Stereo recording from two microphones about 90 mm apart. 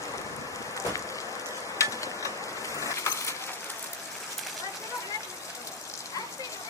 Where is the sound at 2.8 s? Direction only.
35° left (ahead or behind).